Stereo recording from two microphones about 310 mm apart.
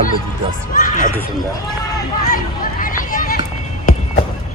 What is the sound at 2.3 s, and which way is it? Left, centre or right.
Run, left.